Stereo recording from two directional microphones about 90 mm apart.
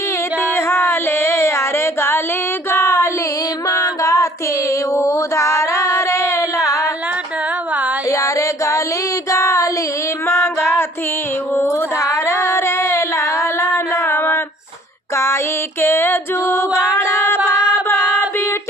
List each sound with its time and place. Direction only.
0.4 s a sound: 25° left (ahead or behind)
2.6 s child singing: 30° left (ahead or behind)
3.7 s music: 40° left (ahead or behind)
4.7 s mantra: 35° left (ahead or behind)
6.0 s a sound: 35° left (ahead or behind)
8.0 s music: 35° left (ahead or behind)
9.3 s child singing: 35° left (ahead or behind)
10.2 s female singing: 25° left (ahead or behind)
11.5 s a sound: 30° left (ahead or behind)
15.8 s female singing: 25° left (ahead or behind)
16.9 s a capella: 30° left (ahead or behind)
17.4 s a sound: 10° right (ahead or behind)
17.8 s music: 30° left (ahead or behind)